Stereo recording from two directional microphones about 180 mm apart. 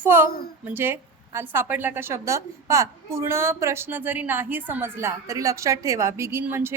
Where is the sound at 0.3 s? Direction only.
55° left (ahead or behind).